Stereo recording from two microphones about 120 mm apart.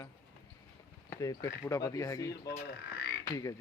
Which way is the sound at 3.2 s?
30° left (ahead or behind).